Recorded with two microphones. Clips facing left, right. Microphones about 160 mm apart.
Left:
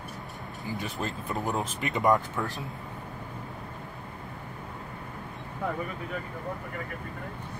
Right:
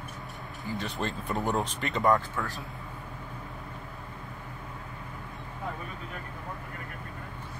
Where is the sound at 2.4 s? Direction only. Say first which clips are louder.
Left 2 dB; 20° left (ahead or behind).